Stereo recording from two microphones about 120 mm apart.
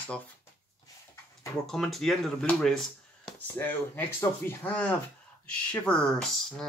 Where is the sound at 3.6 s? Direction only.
15° left (ahead or behind).